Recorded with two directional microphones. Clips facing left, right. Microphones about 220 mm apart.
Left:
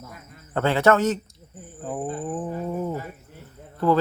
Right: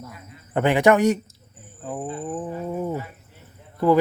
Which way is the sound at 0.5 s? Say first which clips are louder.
Right 2 dB; 15° right (ahead or behind).